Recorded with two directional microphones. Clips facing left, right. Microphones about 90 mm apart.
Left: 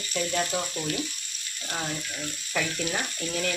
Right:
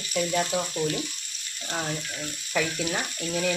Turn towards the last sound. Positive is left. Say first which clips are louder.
# right 2 dB
turn(degrees=-5)  # may be behind; listen again after turning